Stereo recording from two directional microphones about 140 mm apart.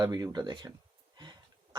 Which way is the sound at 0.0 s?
30° right (ahead or behind).